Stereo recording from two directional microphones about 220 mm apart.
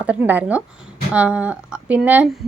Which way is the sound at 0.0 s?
5° right (ahead or behind).